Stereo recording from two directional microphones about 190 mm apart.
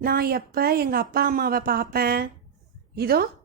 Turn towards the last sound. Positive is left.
turn(degrees=-55)  # may be behind; listen again after turning